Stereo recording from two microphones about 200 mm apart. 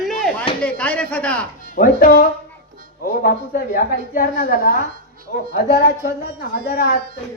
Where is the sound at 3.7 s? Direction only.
45° left (ahead or behind).